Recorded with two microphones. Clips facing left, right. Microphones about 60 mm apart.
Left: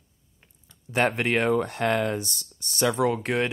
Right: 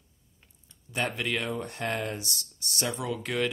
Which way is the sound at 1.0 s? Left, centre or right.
Left.